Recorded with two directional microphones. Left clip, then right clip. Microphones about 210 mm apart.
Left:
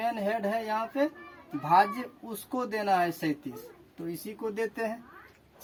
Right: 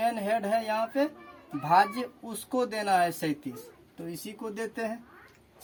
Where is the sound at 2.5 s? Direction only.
35° right (ahead or behind); by 4.9 s 15° right (ahead or behind).